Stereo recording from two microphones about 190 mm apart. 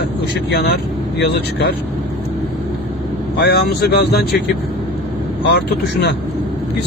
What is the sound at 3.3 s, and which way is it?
Speech, 60° left (ahead or behind).